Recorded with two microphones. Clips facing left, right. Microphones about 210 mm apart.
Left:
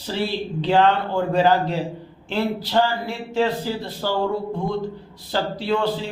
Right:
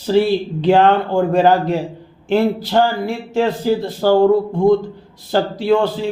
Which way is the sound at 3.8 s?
50° right (ahead or behind).